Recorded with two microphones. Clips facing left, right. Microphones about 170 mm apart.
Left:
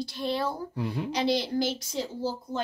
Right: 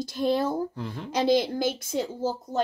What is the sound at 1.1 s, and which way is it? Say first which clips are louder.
Speech: right 6 dB; 50° right (ahead or behind).